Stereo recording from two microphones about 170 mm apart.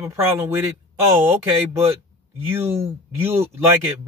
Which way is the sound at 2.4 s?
15° right (ahead or behind).